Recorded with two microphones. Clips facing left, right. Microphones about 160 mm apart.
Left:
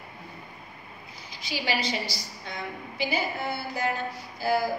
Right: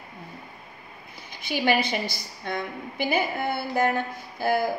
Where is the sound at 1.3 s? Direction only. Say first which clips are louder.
Right 7 dB; 55° right (ahead or behind).